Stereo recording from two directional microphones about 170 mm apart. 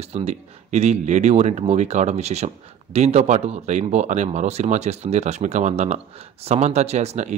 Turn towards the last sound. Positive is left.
turn(degrees=-40)  # may be behind; listen again after turning